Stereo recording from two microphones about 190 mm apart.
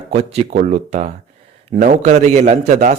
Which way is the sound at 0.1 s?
35° right (ahead or behind).